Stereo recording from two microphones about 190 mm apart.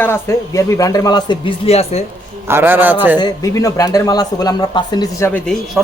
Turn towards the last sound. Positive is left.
turn(degrees=5)  # may be behind; listen again after turning